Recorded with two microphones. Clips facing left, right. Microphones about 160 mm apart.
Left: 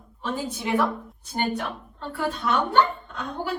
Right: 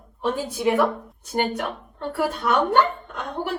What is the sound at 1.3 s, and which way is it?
Speech, 60° right (ahead or behind).